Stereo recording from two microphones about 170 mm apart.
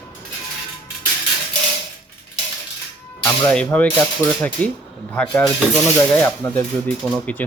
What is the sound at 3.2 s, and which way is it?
Speech, 10° left (ahead or behind).